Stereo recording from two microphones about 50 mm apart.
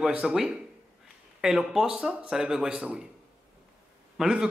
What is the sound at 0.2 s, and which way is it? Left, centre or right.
Speech, centre.